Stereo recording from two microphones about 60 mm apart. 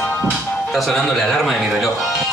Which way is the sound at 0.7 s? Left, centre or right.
Centre.